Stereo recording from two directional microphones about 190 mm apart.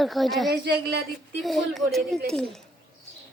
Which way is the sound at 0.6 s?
60° right (ahead or behind).